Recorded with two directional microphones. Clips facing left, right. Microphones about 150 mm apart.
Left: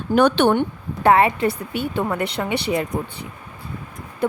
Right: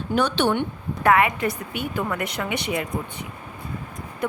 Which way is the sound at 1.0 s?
30° left (ahead or behind).